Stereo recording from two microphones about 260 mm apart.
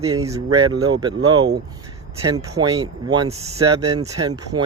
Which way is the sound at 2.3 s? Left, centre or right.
Centre.